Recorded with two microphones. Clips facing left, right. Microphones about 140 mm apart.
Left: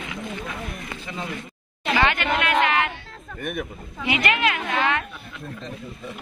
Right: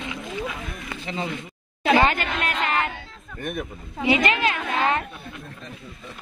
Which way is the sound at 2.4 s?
40° right (ahead or behind).